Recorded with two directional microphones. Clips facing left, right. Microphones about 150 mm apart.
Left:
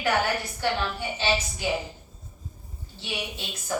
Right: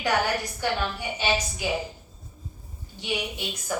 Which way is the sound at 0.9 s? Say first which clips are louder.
Even; 15° right (ahead or behind).